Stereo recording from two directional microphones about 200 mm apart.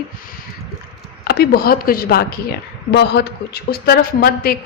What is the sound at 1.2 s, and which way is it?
A woman's voice, 50° left (ahead or behind).